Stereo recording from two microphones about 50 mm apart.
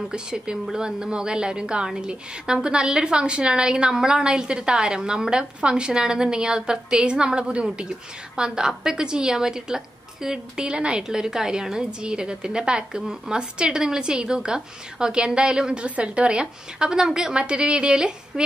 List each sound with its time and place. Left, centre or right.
0.1 s a woman's voice: centre